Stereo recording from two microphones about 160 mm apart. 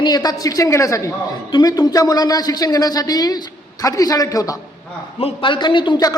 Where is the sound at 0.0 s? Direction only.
25° left (ahead or behind).